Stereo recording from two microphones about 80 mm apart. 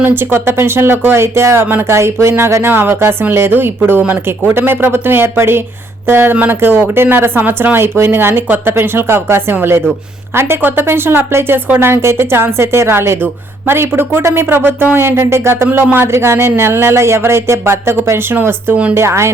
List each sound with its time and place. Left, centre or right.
0.0 s speech: right
18.9 s speech: right